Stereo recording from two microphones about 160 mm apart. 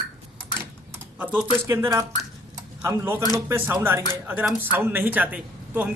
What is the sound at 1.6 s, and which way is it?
A man's voice, 15° right (ahead or behind).